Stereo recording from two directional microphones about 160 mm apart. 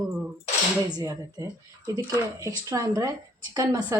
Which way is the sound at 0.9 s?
25° right (ahead or behind).